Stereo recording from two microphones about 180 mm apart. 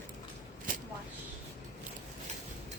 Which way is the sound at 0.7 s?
50° right (ahead or behind).